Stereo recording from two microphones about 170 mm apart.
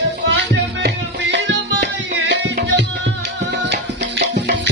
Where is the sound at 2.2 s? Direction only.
90° right.